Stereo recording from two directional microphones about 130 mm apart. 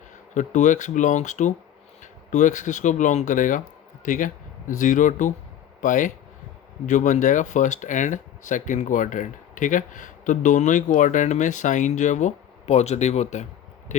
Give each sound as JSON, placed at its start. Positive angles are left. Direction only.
{"t": 0.3, "sound": "speech", "side_deg": 70}
{"t": 4.8, "sound": "speech", "side_deg": 80}